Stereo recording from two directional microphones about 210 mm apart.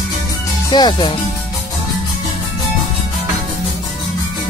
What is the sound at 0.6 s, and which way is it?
Speech, 20° left (ahead or behind).